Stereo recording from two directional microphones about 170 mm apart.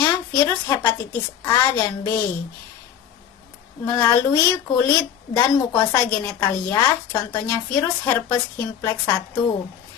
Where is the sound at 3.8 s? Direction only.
15° left (ahead or behind).